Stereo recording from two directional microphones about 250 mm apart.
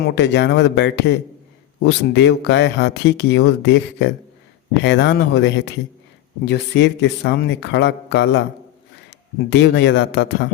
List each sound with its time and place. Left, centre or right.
0.0 s speech: left